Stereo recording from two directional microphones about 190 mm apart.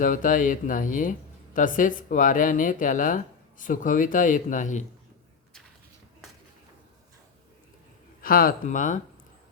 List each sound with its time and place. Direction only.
0.0 s speech: 45° left (ahead or behind)
8.2 s speech: 50° left (ahead or behind)